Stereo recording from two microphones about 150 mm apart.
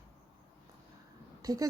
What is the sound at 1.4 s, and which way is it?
Speech, 25° right (ahead or behind).